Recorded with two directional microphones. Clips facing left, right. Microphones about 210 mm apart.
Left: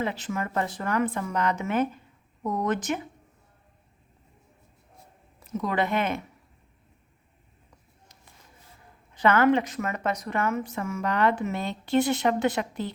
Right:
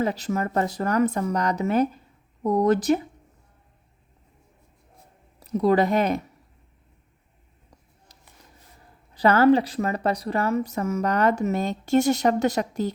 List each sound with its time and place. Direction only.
0.0 s a woman's voice: 40° right (ahead or behind)
5.4 s speech: 35° right (ahead or behind)
9.1 s a woman's voice: 35° right (ahead or behind)